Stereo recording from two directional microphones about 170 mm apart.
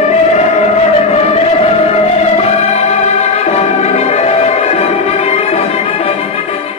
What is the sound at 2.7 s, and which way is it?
Music, 40° left (ahead or behind).